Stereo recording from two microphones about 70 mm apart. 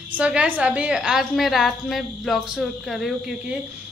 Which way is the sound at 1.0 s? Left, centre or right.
Centre.